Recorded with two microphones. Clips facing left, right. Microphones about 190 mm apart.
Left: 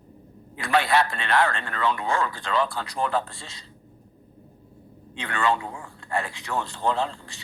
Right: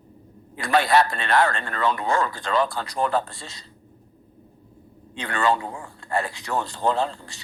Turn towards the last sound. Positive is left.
turn(degrees=-40)  # may be behind; listen again after turning